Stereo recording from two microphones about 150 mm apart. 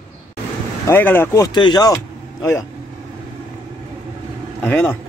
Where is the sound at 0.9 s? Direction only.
15° left (ahead or behind).